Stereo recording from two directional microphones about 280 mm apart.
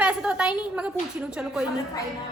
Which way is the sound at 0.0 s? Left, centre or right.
Centre.